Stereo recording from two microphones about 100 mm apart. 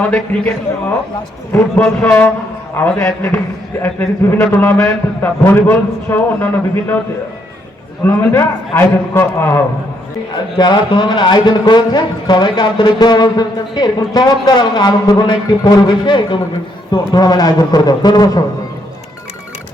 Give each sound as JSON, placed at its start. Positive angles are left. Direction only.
{"t": 0.0, "sound": "a man's voice", "side_deg": 15}
{"t": 2.8, "sound": "a man's voice", "side_deg": 20}
{"t": 8.0, "sound": "a man's voice", "side_deg": 20}
{"t": 10.6, "sound": "a man's voice", "side_deg": 50}